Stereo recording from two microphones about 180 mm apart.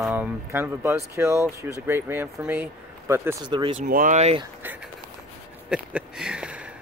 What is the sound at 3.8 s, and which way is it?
Speech, 50° right (ahead or behind).